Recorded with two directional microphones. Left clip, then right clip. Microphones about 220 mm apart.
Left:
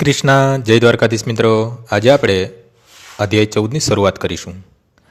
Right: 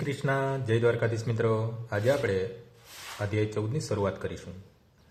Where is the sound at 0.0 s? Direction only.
50° left (ahead or behind).